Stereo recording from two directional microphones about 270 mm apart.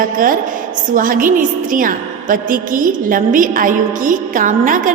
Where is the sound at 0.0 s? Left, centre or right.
Right.